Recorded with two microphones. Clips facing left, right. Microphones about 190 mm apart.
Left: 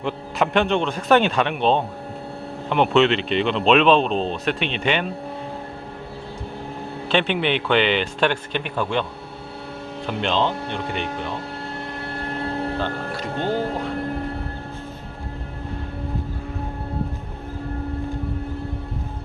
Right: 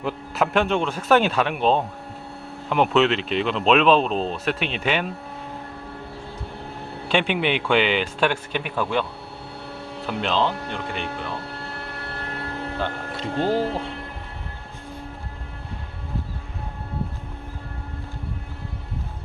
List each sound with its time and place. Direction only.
0.0 s speech: 5° right (ahead or behind)
7.1 s speech: 10° right (ahead or behind)
10.1 s speech: centre (ahead or behind)
13.1 s speech: 30° right (ahead or behind)